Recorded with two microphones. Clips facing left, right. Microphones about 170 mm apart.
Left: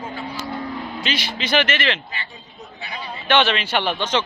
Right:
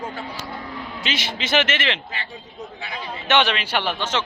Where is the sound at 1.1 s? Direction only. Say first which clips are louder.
Left 1 dB; 25° right (ahead or behind).